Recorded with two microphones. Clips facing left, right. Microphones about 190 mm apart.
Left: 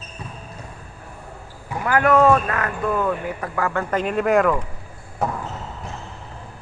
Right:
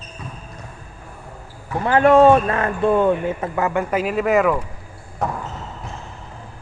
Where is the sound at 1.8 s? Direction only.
25° right (ahead or behind).